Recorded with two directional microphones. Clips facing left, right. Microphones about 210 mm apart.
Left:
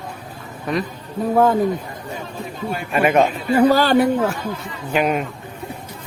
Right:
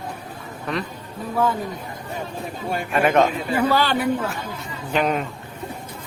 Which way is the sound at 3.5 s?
40° left (ahead or behind).